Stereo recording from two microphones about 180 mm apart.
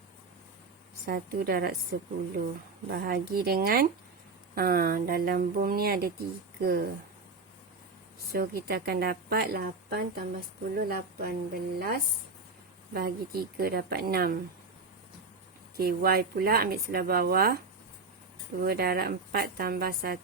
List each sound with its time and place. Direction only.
1.0 s speech: 55° right (ahead or behind)
8.3 s speech: 60° right (ahead or behind)
15.7 s speech: 60° right (ahead or behind)
18.6 s speech: 60° right (ahead or behind)